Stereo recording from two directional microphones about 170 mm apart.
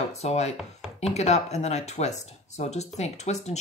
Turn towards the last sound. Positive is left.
turn(degrees=40)  # may be behind; listen again after turning